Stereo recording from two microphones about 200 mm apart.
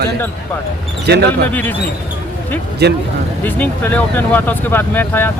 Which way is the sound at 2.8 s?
55° right (ahead or behind).